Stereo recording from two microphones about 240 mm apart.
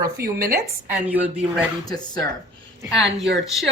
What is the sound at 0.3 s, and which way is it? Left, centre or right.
Speech, right.